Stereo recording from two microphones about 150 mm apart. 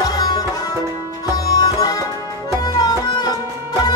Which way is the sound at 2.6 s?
25° left (ahead or behind).